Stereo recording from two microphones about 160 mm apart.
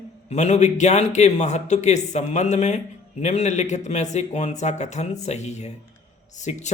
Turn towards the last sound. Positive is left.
turn(degrees=45)  # may be behind; listen again after turning